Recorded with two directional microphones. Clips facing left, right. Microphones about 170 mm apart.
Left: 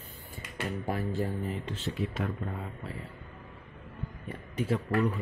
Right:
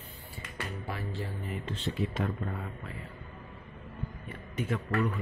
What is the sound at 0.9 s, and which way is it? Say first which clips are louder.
Speech: left 8 dB; 45° left (ahead or behind).